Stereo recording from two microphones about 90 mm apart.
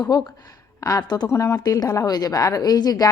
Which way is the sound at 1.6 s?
40° left (ahead or behind).